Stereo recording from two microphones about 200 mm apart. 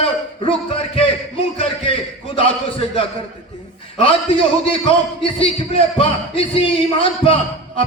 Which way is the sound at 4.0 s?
25° left (ahead or behind).